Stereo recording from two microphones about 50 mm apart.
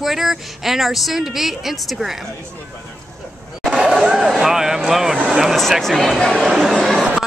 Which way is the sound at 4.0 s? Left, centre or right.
Centre.